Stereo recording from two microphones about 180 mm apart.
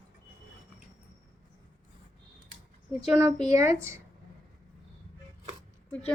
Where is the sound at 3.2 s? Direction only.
15° right (ahead or behind).